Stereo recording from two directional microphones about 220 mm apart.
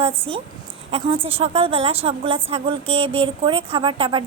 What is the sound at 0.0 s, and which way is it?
A woman's voice, 25° right (ahead or behind).